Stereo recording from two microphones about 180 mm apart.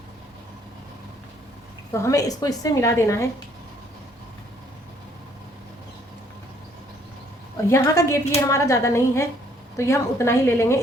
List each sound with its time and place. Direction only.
1.9 s a woman's voice: 15° left (ahead or behind)
7.5 s a woman's voice: 15° left (ahead or behind)